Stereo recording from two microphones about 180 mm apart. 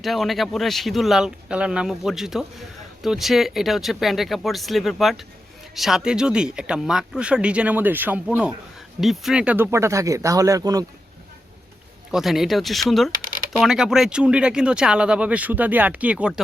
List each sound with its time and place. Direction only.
0.0 s a man's voice: centre (ahead or behind); by 10.8 s 20° right (ahead or behind)
12.1 s a man's voice: centre (ahead or behind)